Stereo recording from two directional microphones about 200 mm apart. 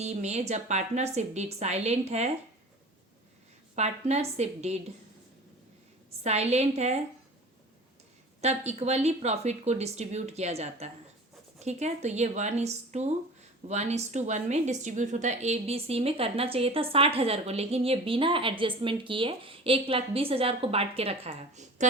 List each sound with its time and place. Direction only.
0.0 s speech: 35° right (ahead or behind)
3.8 s speech: 35° right (ahead or behind)
6.1 s speech: 30° right (ahead or behind)
8.4 s a woman's voice: 35° right (ahead or behind)